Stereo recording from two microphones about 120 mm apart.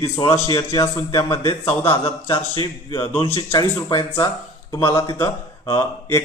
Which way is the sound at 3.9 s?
45° left (ahead or behind).